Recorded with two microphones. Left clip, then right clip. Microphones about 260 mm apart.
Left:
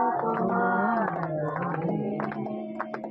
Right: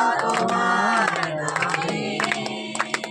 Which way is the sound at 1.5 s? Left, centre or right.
Right.